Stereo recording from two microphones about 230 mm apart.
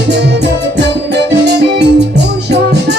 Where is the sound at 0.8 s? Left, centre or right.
Right.